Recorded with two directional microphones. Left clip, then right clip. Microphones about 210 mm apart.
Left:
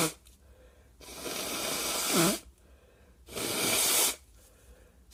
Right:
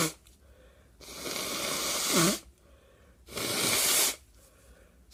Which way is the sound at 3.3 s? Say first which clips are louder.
Right 1 dB; 15° right (ahead or behind).